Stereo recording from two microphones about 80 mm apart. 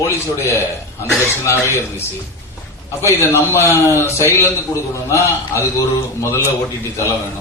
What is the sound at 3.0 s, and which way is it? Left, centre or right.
A man's voice, left.